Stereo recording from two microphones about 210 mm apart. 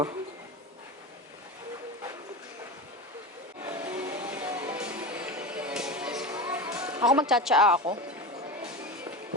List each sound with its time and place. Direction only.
3.6 s music: 10° right (ahead or behind)
7.2 s speech: centre (ahead or behind)